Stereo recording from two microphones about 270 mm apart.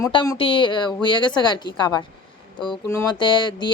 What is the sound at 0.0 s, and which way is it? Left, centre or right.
Speech, centre.